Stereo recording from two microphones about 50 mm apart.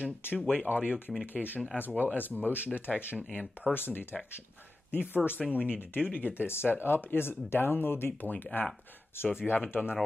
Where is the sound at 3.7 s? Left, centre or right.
Left.